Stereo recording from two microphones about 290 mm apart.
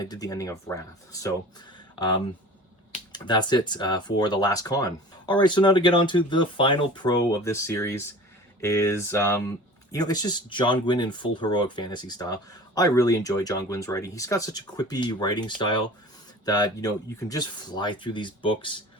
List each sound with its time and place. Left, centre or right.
0.0 s speech: centre
3.1 s speech: centre